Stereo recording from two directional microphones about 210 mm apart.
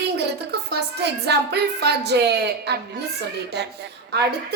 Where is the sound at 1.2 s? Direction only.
50° right (ahead or behind).